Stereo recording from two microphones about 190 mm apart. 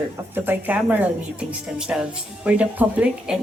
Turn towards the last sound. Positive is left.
turn(degrees=-5)  # may be behind; listen again after turning